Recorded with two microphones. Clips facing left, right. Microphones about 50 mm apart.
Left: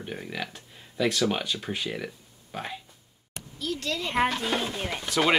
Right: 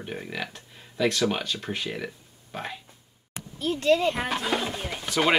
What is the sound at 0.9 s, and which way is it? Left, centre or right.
Speech, centre.